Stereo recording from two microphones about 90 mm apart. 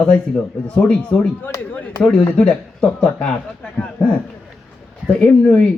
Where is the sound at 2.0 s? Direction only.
10° left (ahead or behind).